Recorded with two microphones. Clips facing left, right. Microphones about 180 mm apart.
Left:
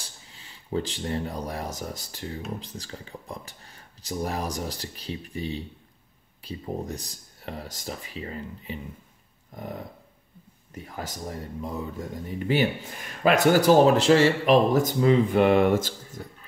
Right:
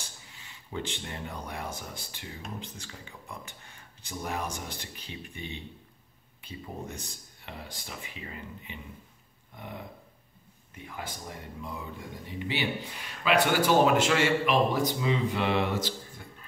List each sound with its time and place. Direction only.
0.0 s speech: 35° left (ahead or behind)